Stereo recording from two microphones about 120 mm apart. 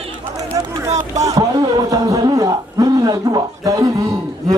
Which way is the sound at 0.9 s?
75° right (ahead or behind).